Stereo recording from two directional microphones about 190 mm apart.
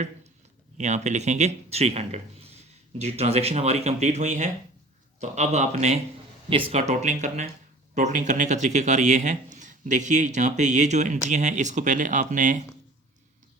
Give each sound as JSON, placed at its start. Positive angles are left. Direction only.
{"t": 0.8, "sound": "a man's voice", "side_deg": -40}